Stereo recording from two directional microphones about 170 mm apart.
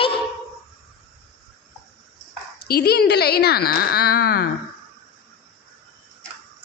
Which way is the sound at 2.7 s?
75° left (ahead or behind).